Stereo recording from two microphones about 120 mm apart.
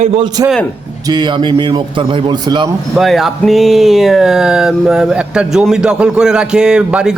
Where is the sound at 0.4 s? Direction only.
35° right (ahead or behind).